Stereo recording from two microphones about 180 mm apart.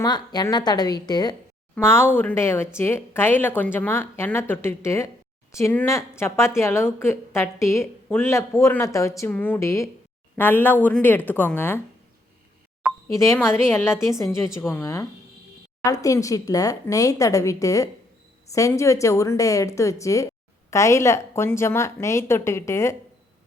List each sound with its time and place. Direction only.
0.0 s a woman's voice: 20° left (ahead or behind)
13.1 s speech: 15° left (ahead or behind)